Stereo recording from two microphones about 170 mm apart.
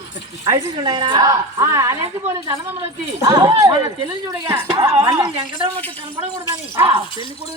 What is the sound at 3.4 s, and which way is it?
A woman's voice, 35° right (ahead or behind).